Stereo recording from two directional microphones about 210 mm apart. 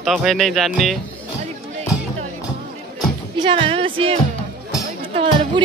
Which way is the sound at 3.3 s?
25° right (ahead or behind).